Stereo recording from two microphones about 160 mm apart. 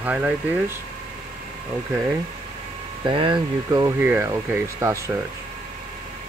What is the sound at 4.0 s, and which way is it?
Speech, 15° right (ahead or behind).